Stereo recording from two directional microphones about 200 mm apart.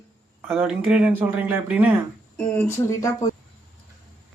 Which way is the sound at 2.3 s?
10° left (ahead or behind).